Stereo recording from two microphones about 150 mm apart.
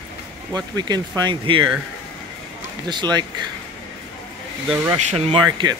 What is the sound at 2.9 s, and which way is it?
Speech, 30° right (ahead or behind).